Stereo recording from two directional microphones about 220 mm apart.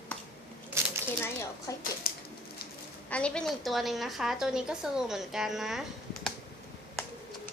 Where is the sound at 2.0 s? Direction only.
40° left (ahead or behind).